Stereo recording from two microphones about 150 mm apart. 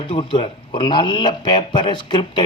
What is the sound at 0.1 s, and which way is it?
Speech, 30° left (ahead or behind).